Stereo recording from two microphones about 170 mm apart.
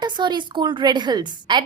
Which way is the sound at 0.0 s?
25° right (ahead or behind).